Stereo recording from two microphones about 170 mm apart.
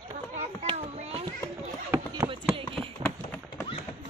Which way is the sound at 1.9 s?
20° right (ahead or behind).